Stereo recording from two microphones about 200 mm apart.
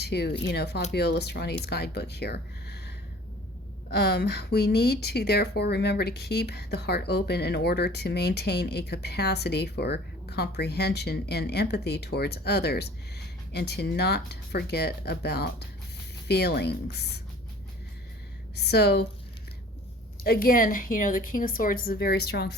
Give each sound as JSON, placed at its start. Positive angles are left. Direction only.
{"t": 0.0, "sound": "a woman's voice", "side_deg": 55}
{"t": 3.9, "sound": "a woman's voice", "side_deg": 55}
{"t": 18.5, "sound": "a woman's voice", "side_deg": 55}
{"t": 20.2, "sound": "a woman's voice", "side_deg": 50}